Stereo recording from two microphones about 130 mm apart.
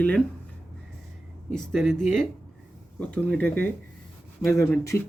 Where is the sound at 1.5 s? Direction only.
5° left (ahead or behind).